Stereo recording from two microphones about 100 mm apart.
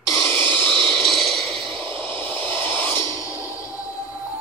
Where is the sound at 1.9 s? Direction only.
60° right (ahead or behind).